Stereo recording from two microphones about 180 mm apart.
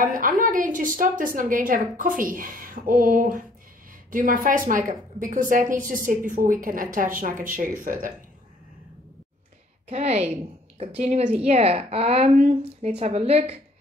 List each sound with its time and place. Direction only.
0.0 s a woman's voice: 50° right (ahead or behind)
9.8 s a woman's voice: 35° right (ahead or behind)